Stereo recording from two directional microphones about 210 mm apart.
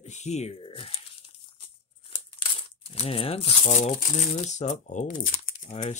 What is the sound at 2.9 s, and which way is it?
Speech, 25° left (ahead or behind).